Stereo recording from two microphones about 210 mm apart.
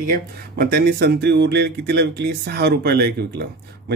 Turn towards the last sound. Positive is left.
turn(degrees=-50)  # may be behind; listen again after turning